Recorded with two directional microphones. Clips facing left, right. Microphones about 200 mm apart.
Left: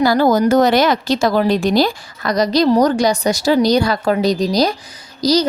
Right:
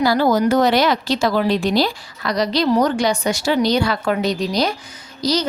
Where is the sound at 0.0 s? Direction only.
45° left (ahead or behind).